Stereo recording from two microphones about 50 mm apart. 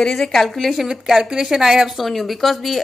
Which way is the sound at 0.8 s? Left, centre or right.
Centre.